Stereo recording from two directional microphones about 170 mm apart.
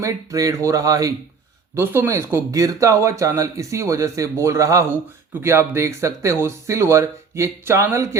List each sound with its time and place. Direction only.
0.0 s speech: 20° right (ahead or behind)